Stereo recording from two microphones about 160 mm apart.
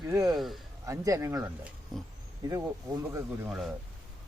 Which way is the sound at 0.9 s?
20° right (ahead or behind).